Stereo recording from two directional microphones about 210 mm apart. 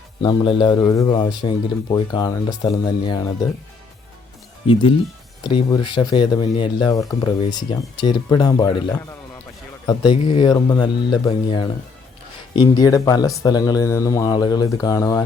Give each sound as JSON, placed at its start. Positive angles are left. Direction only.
{"t": 0.2, "sound": "a man's voice", "side_deg": 20}
{"t": 4.6, "sound": "a man's voice", "side_deg": 25}